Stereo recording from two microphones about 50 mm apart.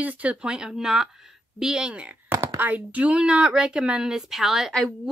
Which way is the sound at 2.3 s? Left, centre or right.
Right.